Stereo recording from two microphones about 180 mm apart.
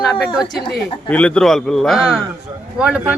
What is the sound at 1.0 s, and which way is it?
A man's voice, 5° left (ahead or behind).